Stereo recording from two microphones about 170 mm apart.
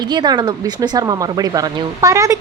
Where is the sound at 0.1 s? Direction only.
25° right (ahead or behind).